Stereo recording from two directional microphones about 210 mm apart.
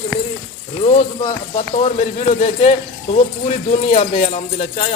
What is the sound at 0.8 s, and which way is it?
A man's voice, 25° left (ahead or behind).